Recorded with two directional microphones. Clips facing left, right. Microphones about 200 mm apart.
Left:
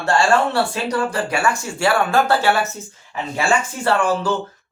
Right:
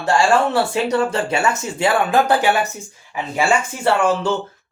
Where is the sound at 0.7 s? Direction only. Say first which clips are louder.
Right 3 dB; 25° right (ahead or behind).